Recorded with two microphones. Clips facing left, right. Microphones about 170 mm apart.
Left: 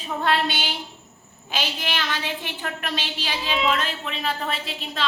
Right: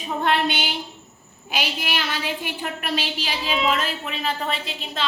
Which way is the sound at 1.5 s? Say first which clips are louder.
Right 1 dB; 10° right (ahead or behind).